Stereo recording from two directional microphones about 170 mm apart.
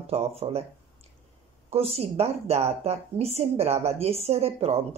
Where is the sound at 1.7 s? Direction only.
35° right (ahead or behind).